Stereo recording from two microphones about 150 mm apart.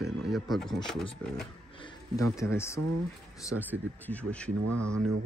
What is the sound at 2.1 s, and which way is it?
Speech, 20° left (ahead or behind).